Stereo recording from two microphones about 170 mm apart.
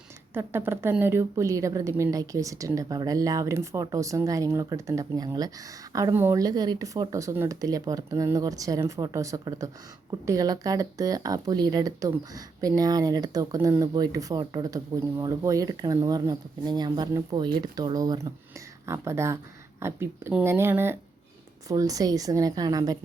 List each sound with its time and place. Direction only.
0.3 s a woman's voice: 15° right (ahead or behind)